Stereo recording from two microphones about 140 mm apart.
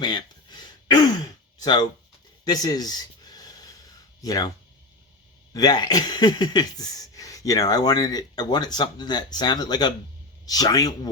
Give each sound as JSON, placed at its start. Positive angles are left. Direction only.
{"t": 0.0, "sound": "throat clearing", "side_deg": 30}
{"t": 1.5, "sound": "speech", "side_deg": 30}
{"t": 2.4, "sound": "a sound", "side_deg": 25}
{"t": 5.5, "sound": "speech", "side_deg": 30}